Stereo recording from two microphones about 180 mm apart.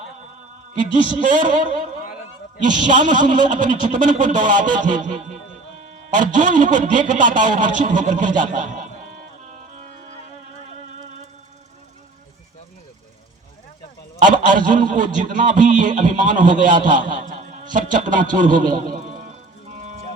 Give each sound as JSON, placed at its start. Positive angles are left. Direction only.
{"t": 0.7, "sound": "speech", "side_deg": -45}
{"t": 14.2, "sound": "a man's voice", "side_deg": -45}